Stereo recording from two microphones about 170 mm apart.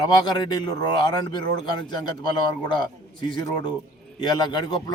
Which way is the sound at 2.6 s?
25° left (ahead or behind).